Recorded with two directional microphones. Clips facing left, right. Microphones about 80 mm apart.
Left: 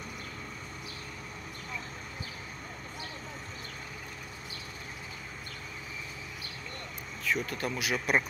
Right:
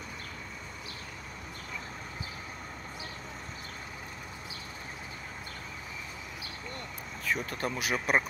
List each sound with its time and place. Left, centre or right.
7.2 s speech: right